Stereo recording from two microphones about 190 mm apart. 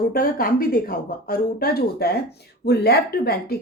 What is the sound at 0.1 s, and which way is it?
A woman's voice, 50° left (ahead or behind).